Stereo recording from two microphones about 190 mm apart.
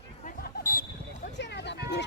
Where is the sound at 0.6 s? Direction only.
50° left (ahead or behind).